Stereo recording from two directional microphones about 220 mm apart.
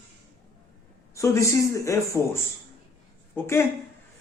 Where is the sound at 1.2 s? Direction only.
15° left (ahead or behind).